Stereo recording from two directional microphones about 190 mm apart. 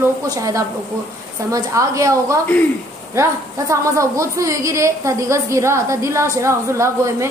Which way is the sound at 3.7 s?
15° right (ahead or behind).